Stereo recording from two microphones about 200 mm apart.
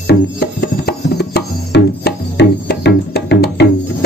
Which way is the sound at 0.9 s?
55° left (ahead or behind).